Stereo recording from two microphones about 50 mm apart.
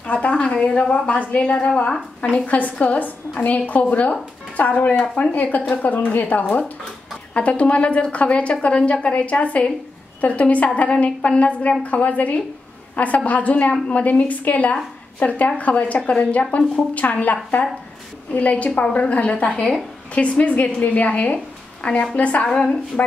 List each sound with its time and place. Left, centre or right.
0.0 s a woman's voice: left
7.3 s a woman's voice: left